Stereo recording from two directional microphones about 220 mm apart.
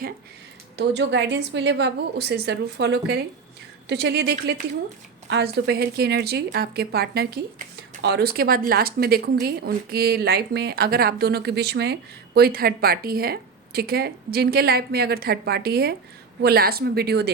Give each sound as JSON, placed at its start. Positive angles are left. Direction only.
{"t": 0.8, "sound": "a woman's voice", "side_deg": -50}